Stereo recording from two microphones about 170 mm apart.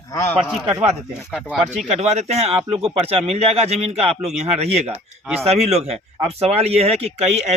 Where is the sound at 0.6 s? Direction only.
35° right (ahead or behind).